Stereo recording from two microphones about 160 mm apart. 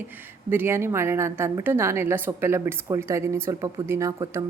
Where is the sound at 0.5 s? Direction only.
15° right (ahead or behind).